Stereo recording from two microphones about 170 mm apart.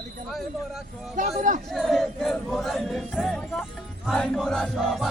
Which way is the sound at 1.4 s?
50° right (ahead or behind).